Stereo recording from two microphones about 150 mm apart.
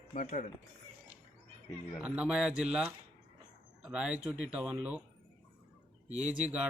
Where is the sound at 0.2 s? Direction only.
55° left (ahead or behind).